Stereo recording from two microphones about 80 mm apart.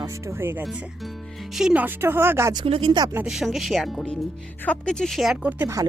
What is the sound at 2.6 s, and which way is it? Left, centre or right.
Speech, right.